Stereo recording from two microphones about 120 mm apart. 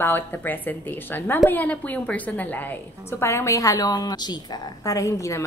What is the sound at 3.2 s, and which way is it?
A woman's voice, 25° left (ahead or behind).